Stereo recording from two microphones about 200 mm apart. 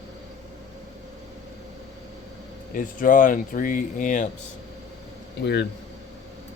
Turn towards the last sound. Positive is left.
turn(degrees=60)  # may be behind; listen again after turning